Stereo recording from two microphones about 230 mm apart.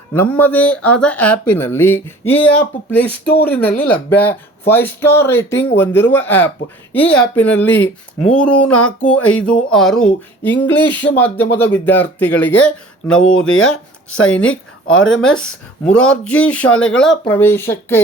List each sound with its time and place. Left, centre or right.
0.1 s speech: centre
10.8 s speech: left
11.5 s speech: centre
13.6 s speech: left
15.2 s speech: centre